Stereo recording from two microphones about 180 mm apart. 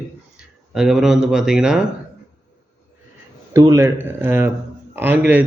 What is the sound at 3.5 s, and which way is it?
A man's voice, 15° right (ahead or behind).